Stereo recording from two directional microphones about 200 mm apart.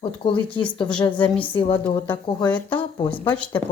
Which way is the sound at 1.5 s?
25° left (ahead or behind).